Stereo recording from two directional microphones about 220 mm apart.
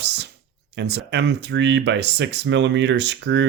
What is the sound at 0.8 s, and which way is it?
Speech, 50° right (ahead or behind).